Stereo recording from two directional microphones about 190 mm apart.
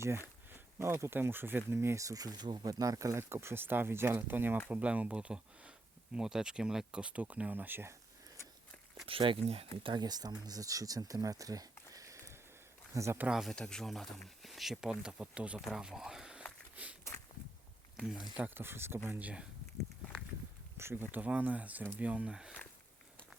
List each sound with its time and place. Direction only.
0.5 s speech: 15° right (ahead or behind)
9.0 s speech: 30° right (ahead or behind); by 16.4 s 5° right (ahead or behind)
16.7 s walk: 5° right (ahead or behind)
17.9 s speech: centre (ahead or behind)
20.7 s speech: 10° right (ahead or behind)